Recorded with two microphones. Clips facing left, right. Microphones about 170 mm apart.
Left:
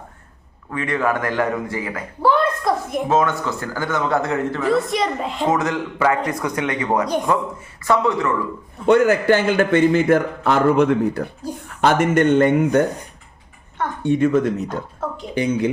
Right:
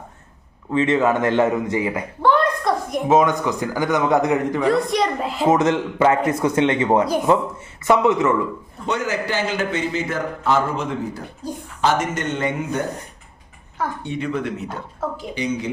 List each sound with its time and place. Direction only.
0.7 s speech: 25° right (ahead or behind)
2.2 s a sound: 5° left (ahead or behind)
3.1 s a man's voice: 15° right (ahead or behind)
4.6 s a woman's voice: centre (ahead or behind)
5.5 s speech: 20° right (ahead or behind)
8.9 s a man's voice: 55° left (ahead or behind)
14.0 s a woman's voice: 50° left (ahead or behind)
15.0 s a sound: centre (ahead or behind)
15.4 s a woman's voice: 55° left (ahead or behind)